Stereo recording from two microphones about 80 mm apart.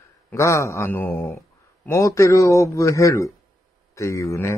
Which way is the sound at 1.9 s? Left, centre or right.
Left.